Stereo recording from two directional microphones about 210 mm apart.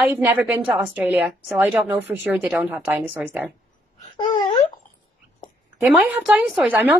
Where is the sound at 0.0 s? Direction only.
5° right (ahead or behind).